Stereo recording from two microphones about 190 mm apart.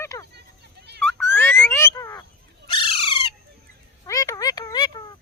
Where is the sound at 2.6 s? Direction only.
25° left (ahead or behind).